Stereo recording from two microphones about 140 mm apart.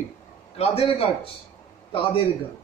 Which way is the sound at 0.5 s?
45° left (ahead or behind).